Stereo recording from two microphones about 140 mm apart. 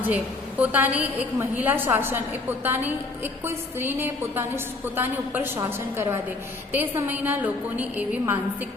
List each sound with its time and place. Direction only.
0.6 s a woman's voice: 10° right (ahead or behind)